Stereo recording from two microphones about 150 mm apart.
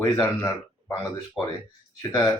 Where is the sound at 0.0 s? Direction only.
20° left (ahead or behind).